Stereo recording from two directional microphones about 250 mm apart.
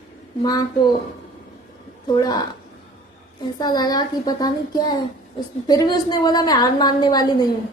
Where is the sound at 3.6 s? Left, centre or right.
Centre.